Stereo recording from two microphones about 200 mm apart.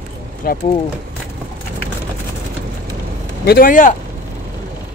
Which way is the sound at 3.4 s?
45° left (ahead or behind).